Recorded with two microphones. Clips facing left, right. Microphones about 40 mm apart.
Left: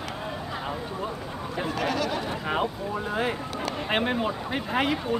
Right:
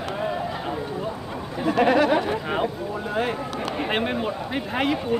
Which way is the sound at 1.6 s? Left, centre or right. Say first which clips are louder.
Right 10 dB; right.